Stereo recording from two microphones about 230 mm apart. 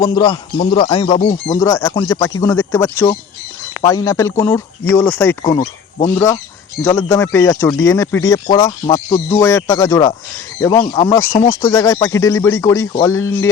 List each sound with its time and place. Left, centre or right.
0.1 s music: left
1.5 s speech: centre
11.3 s speech: left
11.6 s speech: centre